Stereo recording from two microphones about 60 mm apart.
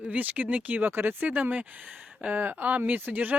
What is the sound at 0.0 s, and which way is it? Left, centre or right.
Speech, right.